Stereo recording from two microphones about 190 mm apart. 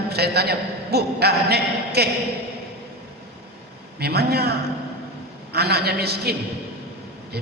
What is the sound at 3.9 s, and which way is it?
A man's voice, 55° right (ahead or behind).